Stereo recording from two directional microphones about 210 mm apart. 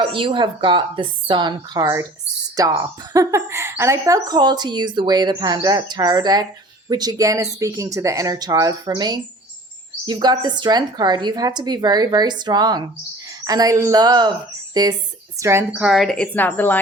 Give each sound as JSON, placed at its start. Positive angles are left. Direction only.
{"t": 0.0, "sound": "a woman's voice", "side_deg": -25}